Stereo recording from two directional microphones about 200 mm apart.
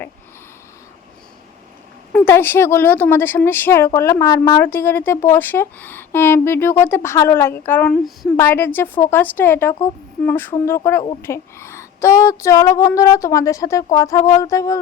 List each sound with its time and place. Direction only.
2.1 s a woman's voice: 10° left (ahead or behind)